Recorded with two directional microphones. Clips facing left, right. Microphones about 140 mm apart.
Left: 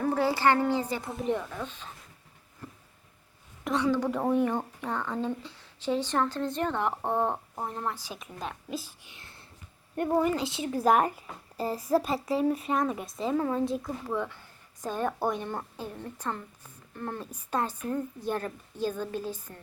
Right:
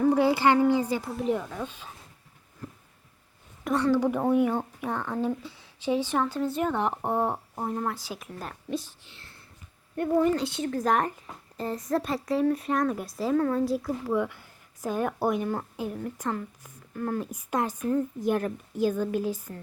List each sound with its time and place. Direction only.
0.1 s speech: 15° right (ahead or behind)
2.6 s a sound: centre (ahead or behind)
3.6 s a woman's voice: centre (ahead or behind)
8.4 s speech: centre (ahead or behind)
9.0 s speech: 15° left (ahead or behind)
10.2 s speech: centre (ahead or behind)